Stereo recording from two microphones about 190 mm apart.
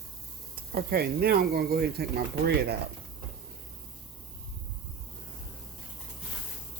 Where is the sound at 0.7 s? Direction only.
55° right (ahead or behind).